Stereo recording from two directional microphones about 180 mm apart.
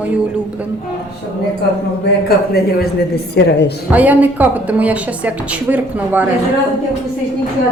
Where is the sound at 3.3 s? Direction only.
70° left (ahead or behind).